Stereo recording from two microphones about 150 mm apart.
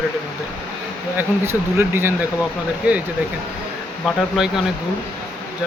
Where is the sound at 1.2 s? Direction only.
15° right (ahead or behind).